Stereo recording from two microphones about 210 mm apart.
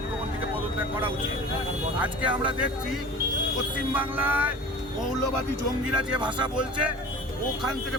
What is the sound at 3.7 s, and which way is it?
Speech, 5° right (ahead or behind).